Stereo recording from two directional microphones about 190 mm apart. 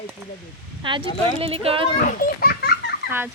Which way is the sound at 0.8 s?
25° right (ahead or behind).